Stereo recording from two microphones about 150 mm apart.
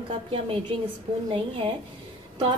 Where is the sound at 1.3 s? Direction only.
35° right (ahead or behind).